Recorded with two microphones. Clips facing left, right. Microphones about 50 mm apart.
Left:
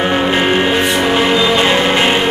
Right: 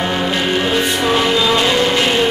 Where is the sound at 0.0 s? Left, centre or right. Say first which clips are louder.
Left 4 dB; left.